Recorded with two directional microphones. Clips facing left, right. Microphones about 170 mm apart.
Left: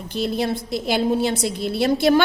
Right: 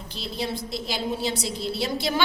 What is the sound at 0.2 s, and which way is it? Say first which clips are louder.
A woman's voice: left 8 dB; 55° left (ahead or behind).